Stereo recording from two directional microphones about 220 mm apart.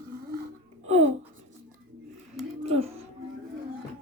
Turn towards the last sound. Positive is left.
turn(degrees=-25)  # may be behind; listen again after turning